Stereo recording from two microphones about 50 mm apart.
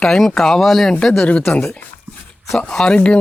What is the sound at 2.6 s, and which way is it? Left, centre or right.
Speech, centre.